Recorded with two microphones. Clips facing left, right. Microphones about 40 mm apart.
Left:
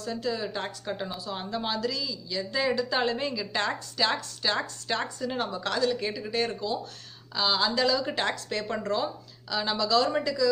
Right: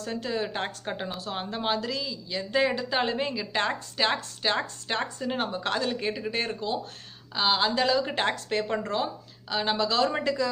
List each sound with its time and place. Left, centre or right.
0.0 s a woman's voice: right
1.1 s speech: right
1.4 s a woman's voice: right